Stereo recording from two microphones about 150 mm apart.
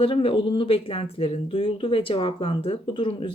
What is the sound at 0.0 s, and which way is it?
Speech, 40° left (ahead or behind).